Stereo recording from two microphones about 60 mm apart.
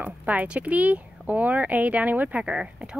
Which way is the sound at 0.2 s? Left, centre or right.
Right.